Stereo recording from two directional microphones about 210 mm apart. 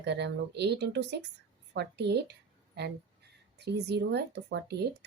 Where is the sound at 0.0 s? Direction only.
55° right (ahead or behind).